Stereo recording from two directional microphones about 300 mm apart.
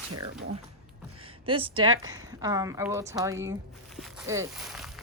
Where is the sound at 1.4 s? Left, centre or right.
Centre.